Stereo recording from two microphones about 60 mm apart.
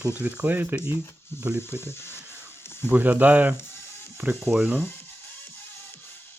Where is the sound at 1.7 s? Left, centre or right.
Left.